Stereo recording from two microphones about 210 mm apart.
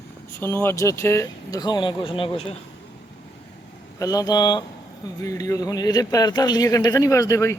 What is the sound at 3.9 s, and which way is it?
A man's voice, 15° left (ahead or behind).